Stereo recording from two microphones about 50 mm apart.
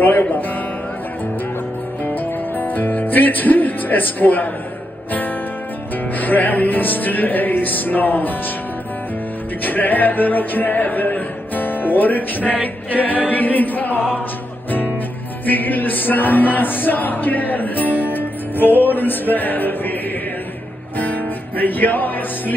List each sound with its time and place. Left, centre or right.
0.0 s music: left
2.0 s music: left
6.1 s music: left
9.6 s music: left
13.3 s a capella: left
15.4 s music: left
21.0 s music: left